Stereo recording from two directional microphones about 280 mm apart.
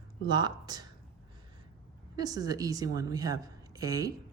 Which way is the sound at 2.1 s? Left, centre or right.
Centre.